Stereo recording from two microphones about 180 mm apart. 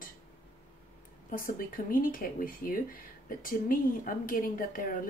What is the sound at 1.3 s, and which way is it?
Speech, 50° left (ahead or behind).